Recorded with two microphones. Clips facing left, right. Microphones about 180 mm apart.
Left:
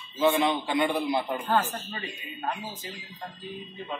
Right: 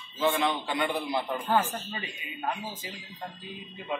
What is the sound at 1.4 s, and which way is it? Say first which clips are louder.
Speech: even; 10° right (ahead or behind).